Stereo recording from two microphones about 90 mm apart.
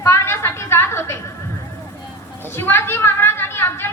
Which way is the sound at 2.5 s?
25° left (ahead or behind).